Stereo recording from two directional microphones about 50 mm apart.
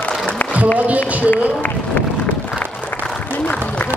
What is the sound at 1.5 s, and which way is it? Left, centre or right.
Run, left.